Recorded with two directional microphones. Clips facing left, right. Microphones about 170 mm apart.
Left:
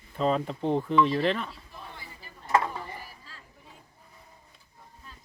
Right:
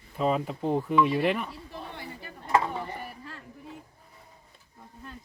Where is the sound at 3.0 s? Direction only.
60° right (ahead or behind).